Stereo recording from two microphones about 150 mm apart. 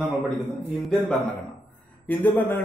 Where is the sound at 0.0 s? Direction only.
Centre (ahead or behind).